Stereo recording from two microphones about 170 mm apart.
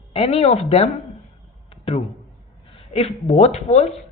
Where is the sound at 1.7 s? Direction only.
30° left (ahead or behind).